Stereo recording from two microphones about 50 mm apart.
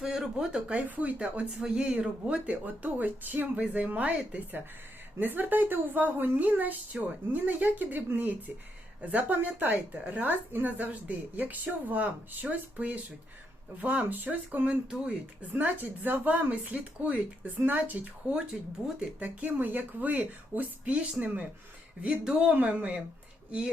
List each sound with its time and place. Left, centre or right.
0.0 s speech: centre
0.9 s speech: right
1.6 s speech: centre
5.2 s speech: right
22.0 s speech: centre